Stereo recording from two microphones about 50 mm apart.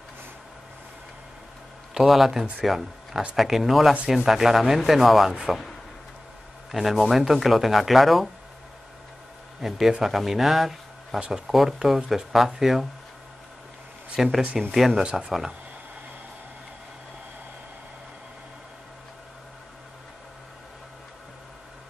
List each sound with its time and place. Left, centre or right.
2.0 s speech: centre
6.7 s speech: centre
9.6 s a man's voice: centre
11.1 s speech: centre
11.4 s speech: centre
14.1 s speech: centre